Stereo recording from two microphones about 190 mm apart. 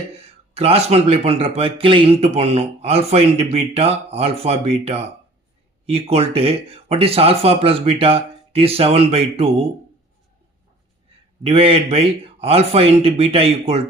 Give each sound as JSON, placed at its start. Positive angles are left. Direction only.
{"t": 0.2, "sound": "speech", "side_deg": -30}
{"t": 11.4, "sound": "speech", "side_deg": -30}